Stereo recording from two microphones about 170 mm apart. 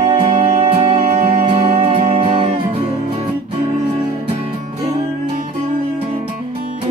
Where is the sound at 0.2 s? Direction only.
35° right (ahead or behind).